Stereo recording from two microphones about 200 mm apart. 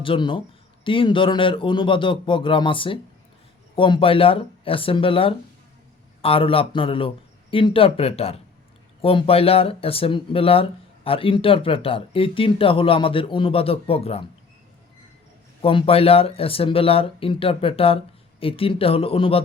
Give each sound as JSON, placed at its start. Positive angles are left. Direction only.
{"t": 0.0, "sound": "speech", "side_deg": 25}
{"t": 15.6, "sound": "speech", "side_deg": 30}